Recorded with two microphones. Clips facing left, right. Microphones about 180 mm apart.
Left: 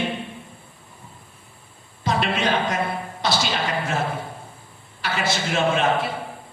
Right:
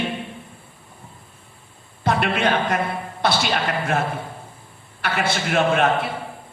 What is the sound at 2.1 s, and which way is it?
A man's voice, 55° right (ahead or behind).